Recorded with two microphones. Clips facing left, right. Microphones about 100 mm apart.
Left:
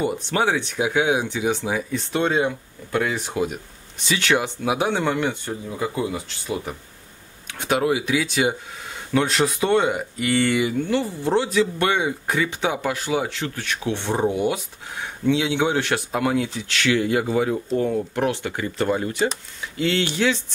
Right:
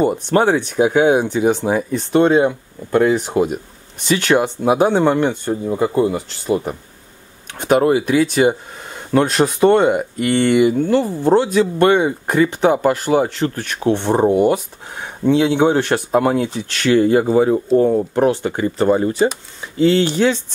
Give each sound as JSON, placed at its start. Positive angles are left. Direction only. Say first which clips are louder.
{"t": 0.0, "sound": "speech", "louder": "right 7 dB", "side_deg": -45}